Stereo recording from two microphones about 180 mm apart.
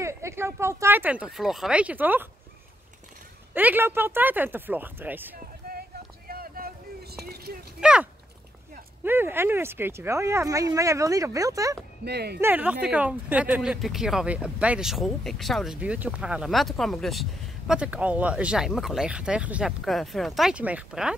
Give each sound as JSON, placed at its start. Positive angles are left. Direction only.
{"t": 0.0, "sound": "speech", "side_deg": -15}
{"t": 3.5, "sound": "speech", "side_deg": -10}
{"t": 5.7, "sound": "vehicle", "side_deg": -55}
{"t": 7.8, "sound": "speech", "side_deg": -5}
{"t": 12.0, "sound": "speech", "side_deg": -65}
{"t": 12.4, "sound": "speech", "side_deg": -10}